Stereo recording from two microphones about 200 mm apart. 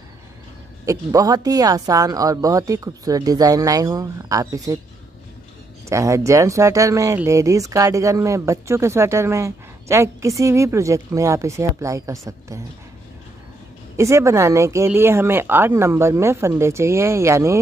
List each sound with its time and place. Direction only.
0.8 s speech: 20° right (ahead or behind)
5.9 s speech: 15° right (ahead or behind)
13.9 s speech: 15° right (ahead or behind)